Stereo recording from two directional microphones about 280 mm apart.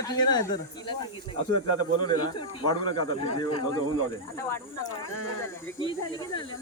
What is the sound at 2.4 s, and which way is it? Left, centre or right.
Speech, centre.